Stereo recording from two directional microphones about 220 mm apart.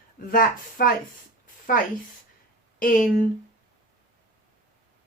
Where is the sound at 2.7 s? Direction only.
40° left (ahead or behind).